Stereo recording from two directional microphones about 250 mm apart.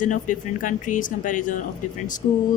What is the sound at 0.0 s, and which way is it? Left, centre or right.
Speech, left.